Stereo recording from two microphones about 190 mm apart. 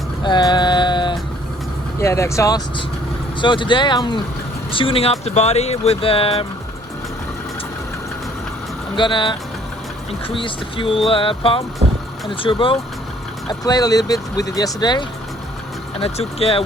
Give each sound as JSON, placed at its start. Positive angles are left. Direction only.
{"t": 0.2, "sound": "a sound", "side_deg": 25}
{"t": 2.0, "sound": "speech", "side_deg": 15}
{"t": 9.0, "sound": "speech", "side_deg": 25}